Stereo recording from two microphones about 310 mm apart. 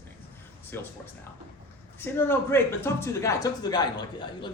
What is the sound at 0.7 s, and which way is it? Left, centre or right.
Speech, centre.